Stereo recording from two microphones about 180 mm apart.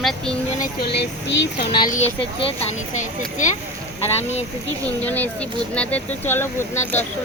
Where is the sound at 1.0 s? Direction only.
70° left (ahead or behind).